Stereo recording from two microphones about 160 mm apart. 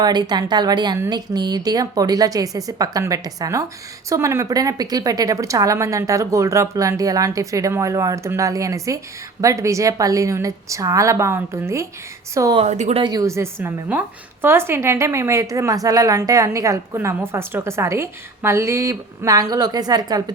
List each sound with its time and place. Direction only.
0.0 s a woman's voice: 25° right (ahead or behind)
12.5 s speech: 45° right (ahead or behind)
13.0 s a woman's voice: 25° right (ahead or behind)